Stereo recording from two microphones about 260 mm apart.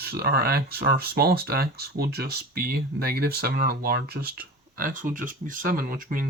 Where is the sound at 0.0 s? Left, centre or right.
Right.